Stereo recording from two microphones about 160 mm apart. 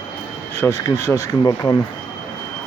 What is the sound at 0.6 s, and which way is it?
Speech, 15° left (ahead or behind).